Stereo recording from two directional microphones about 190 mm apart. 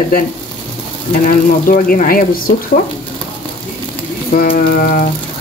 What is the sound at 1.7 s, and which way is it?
Speech, 50° left (ahead or behind).